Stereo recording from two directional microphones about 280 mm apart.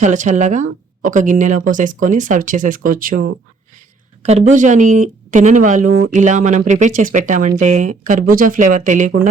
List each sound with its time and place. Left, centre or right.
0.0 s speech: right